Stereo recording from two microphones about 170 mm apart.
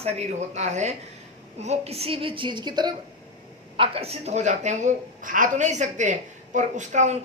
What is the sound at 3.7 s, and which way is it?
A woman's voice, 35° right (ahead or behind).